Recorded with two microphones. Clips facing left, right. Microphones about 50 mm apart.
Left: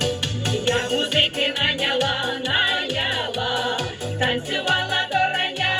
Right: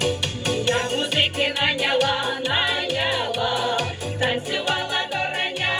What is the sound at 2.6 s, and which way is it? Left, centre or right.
Music, left.